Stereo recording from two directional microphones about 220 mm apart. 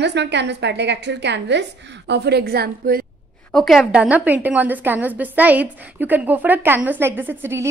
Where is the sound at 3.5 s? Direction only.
Centre (ahead or behind).